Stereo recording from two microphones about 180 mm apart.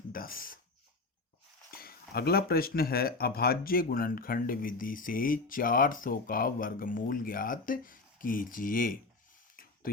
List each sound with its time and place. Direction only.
0.1 s speech: 55° left (ahead or behind)
1.8 s speech: 60° left (ahead or behind)
9.6 s mechanisms: 50° left (ahead or behind)